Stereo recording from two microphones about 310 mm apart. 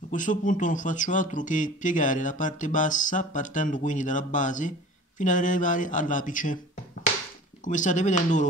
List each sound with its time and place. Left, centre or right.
0.1 s speech: left
7.6 s speech: left